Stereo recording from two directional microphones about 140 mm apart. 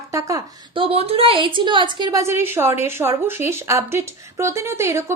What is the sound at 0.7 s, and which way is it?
A woman's voice, 40° right (ahead or behind).